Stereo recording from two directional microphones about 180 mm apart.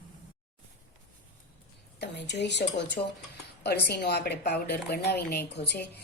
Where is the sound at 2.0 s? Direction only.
70° left (ahead or behind).